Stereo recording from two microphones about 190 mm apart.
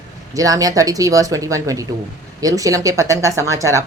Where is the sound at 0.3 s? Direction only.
20° right (ahead or behind).